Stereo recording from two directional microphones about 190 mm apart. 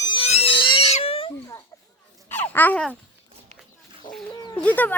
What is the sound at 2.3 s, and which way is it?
Babbling, 10° left (ahead or behind).